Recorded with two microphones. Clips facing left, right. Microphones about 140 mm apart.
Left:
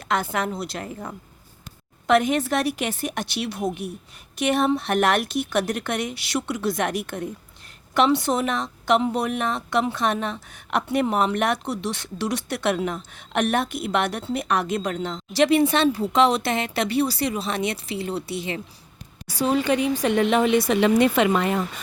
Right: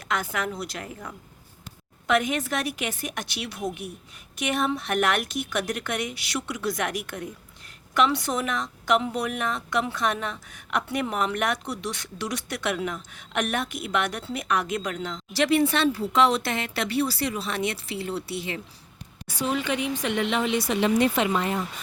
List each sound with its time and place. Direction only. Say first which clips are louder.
0.1 s a woman's voice: left 4 dB; 30° left (ahead or behind)
2.0 s a woman's voice: left 5 dB; 30° left (ahead or behind)
19.3 s speech: left 6 dB; 35° left (ahead or behind); by 21.6 s 70° left (ahead or behind)